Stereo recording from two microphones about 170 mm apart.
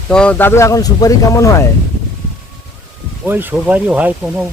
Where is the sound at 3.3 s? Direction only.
10° right (ahead or behind).